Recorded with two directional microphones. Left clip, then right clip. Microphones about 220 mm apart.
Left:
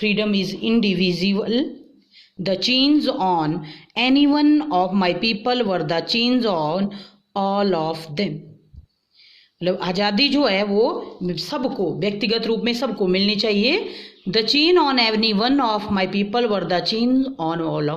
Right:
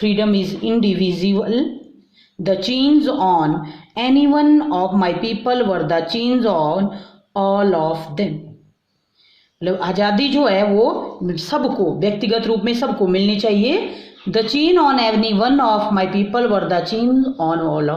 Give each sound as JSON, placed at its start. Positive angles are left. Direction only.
{"t": 0.0, "sound": "speech", "side_deg": 40}
{"t": 2.4, "sound": "speech", "side_deg": 40}
{"t": 9.6, "sound": "speech", "side_deg": 40}